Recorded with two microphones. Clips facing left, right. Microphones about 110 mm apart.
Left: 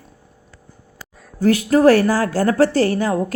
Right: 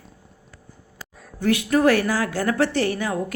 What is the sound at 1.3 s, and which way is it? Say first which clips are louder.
A woman's voice: left 5 dB; 35° left (ahead or behind).